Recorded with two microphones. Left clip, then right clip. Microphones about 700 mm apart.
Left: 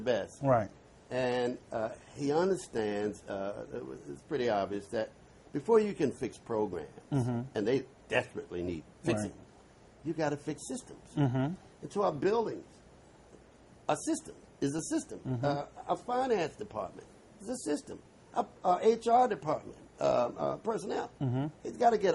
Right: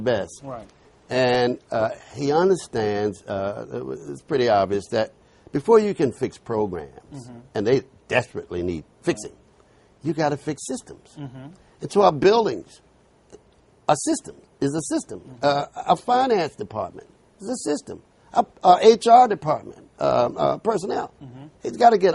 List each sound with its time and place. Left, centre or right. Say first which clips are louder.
0.0 s a man's voice: right 7 dB; right
11.2 s speech: left 9 dB; left
11.9 s speech: right 14 dB; right
13.8 s a man's voice: right 12 dB; right